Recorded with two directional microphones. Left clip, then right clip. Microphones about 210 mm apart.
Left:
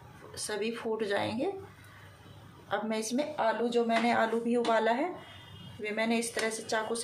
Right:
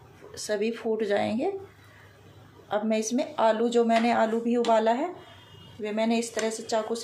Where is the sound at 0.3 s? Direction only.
10° right (ahead or behind).